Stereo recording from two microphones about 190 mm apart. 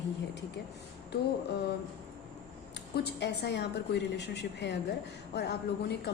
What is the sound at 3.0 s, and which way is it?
A woman's voice, 65° left (ahead or behind).